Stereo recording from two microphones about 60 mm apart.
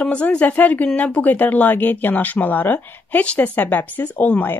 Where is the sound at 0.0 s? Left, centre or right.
Centre.